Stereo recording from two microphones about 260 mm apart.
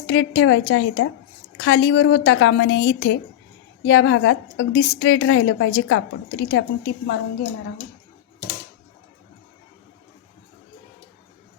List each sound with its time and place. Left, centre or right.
0.0 s a woman's voice: left